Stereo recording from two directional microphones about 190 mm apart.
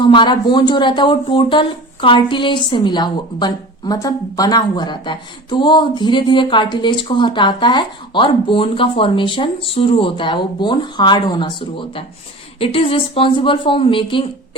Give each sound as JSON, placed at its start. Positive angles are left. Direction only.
{"t": 0.0, "sound": "speech", "side_deg": 25}